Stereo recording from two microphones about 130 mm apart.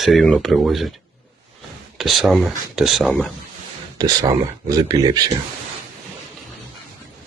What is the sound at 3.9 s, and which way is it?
Speech, 30° right (ahead or behind).